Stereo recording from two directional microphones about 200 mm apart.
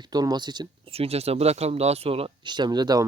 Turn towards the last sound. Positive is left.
turn(degrees=-20)  # may be behind; listen again after turning